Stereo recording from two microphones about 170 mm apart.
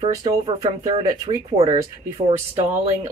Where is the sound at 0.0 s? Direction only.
25° right (ahead or behind).